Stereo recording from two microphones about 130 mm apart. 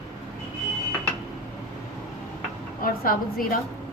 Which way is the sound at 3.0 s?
90° left.